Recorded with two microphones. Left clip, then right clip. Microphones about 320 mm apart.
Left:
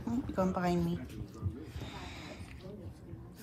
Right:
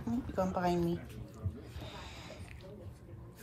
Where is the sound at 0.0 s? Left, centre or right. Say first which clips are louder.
Left 1 dB; centre.